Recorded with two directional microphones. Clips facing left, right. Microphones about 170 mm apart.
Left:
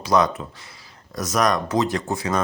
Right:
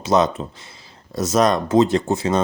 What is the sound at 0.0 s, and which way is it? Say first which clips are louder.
Speech: right 2 dB; 25° right (ahead or behind).